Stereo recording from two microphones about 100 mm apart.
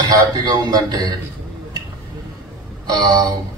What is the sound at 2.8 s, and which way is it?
Speech, 45° right (ahead or behind).